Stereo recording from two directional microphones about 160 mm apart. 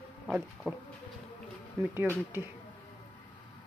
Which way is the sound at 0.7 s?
10° right (ahead or behind).